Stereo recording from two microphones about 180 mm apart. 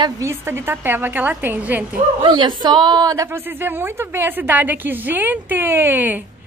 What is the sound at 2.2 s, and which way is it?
A woman's voice, 25° right (ahead or behind).